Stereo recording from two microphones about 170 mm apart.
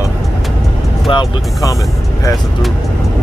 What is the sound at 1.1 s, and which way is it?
Speech, 30° left (ahead or behind).